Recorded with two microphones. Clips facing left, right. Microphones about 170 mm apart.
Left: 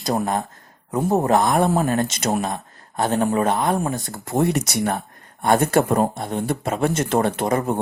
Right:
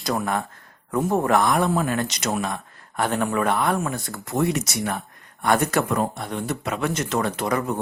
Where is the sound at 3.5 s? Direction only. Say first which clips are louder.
Left 2 dB; 20° left (ahead or behind).